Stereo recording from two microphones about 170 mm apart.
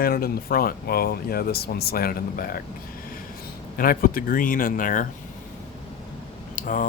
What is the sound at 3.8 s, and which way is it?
Speech, 55° left (ahead or behind).